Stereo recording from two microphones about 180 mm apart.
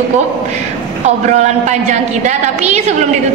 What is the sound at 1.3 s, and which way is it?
A woman's voice, 40° right (ahead or behind).